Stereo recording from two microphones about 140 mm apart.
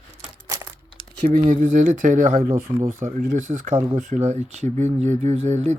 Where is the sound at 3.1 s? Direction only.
65° right (ahead or behind).